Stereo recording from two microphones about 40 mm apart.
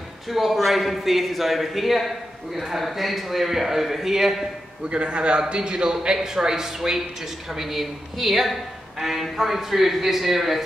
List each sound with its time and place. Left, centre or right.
0.3 s a man's voice: centre
4.8 s a man's voice: right; by 10.6 s centre